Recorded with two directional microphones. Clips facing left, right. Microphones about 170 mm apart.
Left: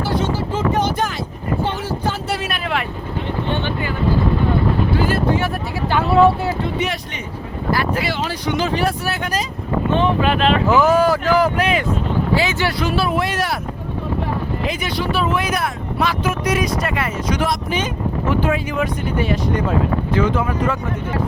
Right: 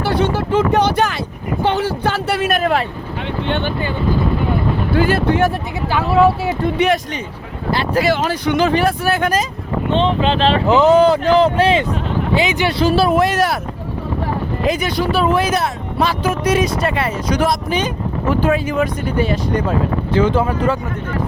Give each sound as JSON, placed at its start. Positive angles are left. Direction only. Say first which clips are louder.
{"t": 0.0, "sound": "vehicle", "louder": "right 3 dB", "side_deg": -65}
{"t": 4.9, "sound": "speech", "louder": "right 7 dB", "side_deg": -70}
{"t": 5.9, "sound": "speech", "louder": "even", "side_deg": 0}
{"t": 6.7, "sound": "speech", "louder": "right 7 dB", "side_deg": -55}
{"t": 7.9, "sound": "speech", "louder": "right 6 dB", "side_deg": -45}
{"t": 9.9, "sound": "speech", "louder": "right 2 dB", "side_deg": -20}
{"t": 12.8, "sound": "speech", "louder": "right 8 dB", "side_deg": -35}
{"t": 14.7, "sound": "speech", "louder": "right 7 dB", "side_deg": -45}